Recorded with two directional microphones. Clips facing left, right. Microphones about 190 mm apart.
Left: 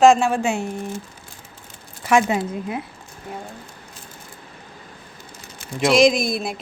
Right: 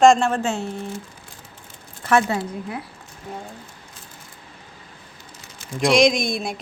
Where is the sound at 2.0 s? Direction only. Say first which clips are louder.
Left 2 dB; 15° left (ahead or behind).